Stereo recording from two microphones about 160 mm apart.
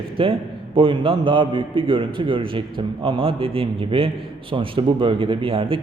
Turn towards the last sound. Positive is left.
turn(degrees=-35)  # may be behind; listen again after turning